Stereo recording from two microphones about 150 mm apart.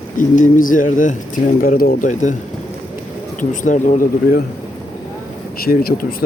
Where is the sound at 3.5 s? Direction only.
55° left (ahead or behind).